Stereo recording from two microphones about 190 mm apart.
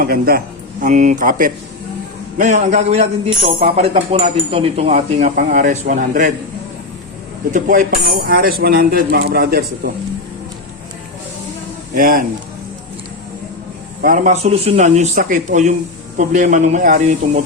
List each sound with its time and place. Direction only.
0.0 s speech: 50° right (ahead or behind)
7.5 s speech: 45° right (ahead or behind)
11.9 s speech: 50° right (ahead or behind)
14.0 s speech: 45° right (ahead or behind)